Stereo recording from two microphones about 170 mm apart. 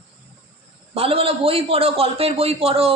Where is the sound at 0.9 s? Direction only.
35° right (ahead or behind).